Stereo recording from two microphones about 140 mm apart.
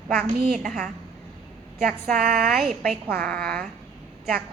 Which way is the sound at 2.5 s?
Centre (ahead or behind).